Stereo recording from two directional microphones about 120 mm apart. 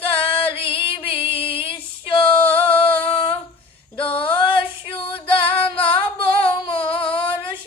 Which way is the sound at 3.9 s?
45° left (ahead or behind).